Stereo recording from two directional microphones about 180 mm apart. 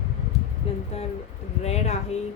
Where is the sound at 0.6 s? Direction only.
35° left (ahead or behind).